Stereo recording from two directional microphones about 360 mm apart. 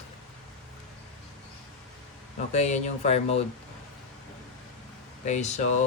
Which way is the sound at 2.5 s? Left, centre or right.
Centre.